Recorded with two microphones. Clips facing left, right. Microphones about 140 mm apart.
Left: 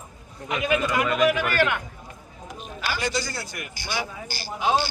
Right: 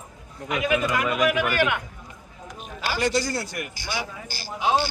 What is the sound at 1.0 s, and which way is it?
Speech, 10° right (ahead or behind).